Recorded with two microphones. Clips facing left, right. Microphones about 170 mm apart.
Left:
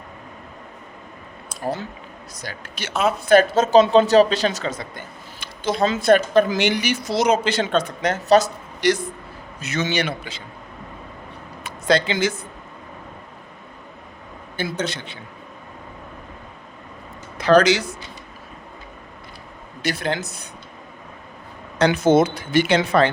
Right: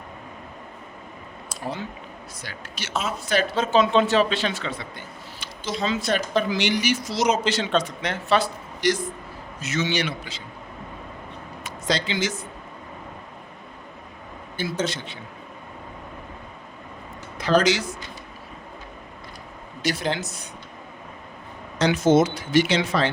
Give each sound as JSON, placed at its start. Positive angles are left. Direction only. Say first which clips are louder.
{"t": 1.5, "sound": "speech", "louder": "left 5 dB", "side_deg": 40}
{"t": 8.8, "sound": "speech", "louder": "left 3 dB", "side_deg": 65}
{"t": 11.6, "sound": "speech", "louder": "left 7 dB", "side_deg": 55}
{"t": 14.8, "sound": "speech", "louder": "even", "side_deg": 60}
{"t": 17.3, "sound": "speech", "louder": "left 5 dB", "side_deg": 70}
{"t": 19.8, "sound": "speech", "louder": "left 1 dB", "side_deg": 55}
{"t": 21.8, "sound": "speech", "louder": "left 2 dB", "side_deg": 60}